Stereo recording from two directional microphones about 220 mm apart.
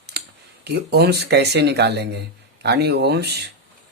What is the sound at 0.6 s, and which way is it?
Speech, 50° right (ahead or behind).